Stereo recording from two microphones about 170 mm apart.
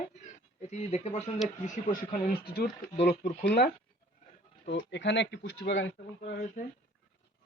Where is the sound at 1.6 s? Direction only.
55° left (ahead or behind).